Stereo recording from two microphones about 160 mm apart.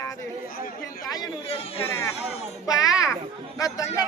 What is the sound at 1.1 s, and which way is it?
Speech, 30° left (ahead or behind).